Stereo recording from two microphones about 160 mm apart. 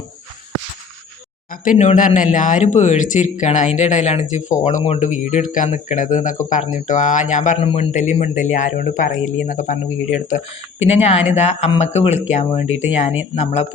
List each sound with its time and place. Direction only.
1.5 s speech: 55° left (ahead or behind)
10.8 s speech: 40° left (ahead or behind)